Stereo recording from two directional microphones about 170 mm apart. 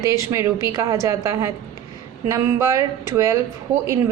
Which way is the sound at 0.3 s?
20° right (ahead or behind).